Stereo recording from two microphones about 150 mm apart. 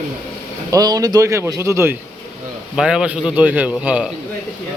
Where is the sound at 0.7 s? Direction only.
25° right (ahead or behind).